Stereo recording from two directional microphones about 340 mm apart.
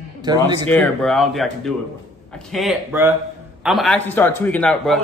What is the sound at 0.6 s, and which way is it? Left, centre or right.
A man's voice, centre.